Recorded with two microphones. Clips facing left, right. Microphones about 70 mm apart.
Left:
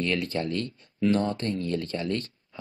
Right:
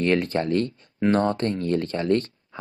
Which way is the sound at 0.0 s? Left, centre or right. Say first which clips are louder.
Right 6 dB; right.